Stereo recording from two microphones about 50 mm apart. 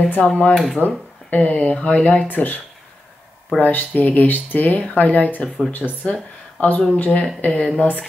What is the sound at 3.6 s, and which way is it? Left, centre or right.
Speech, left.